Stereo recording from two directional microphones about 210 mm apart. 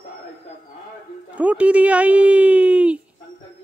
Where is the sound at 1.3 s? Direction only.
5° right (ahead or behind).